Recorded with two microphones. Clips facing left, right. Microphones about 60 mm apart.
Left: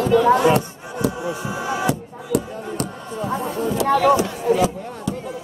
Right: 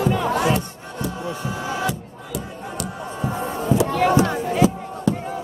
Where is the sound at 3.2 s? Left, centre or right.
Right.